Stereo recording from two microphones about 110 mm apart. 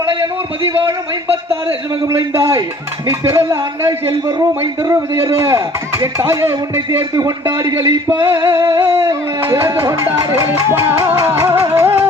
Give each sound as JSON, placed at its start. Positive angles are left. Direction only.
{"t": 0.6, "sound": "a man's voice", "side_deg": -55}
{"t": 2.3, "sound": "a man's voice", "side_deg": -25}
{"t": 10.5, "sound": "a man's voice", "side_deg": -20}